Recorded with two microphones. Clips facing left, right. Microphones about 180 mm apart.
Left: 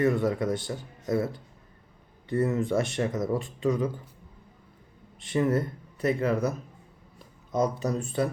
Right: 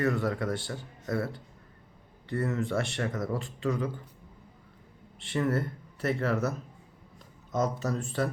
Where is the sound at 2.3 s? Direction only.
20° left (ahead or behind).